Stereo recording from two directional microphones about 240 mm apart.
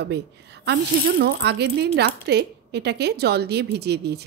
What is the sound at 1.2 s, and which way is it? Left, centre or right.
A woman's voice, right.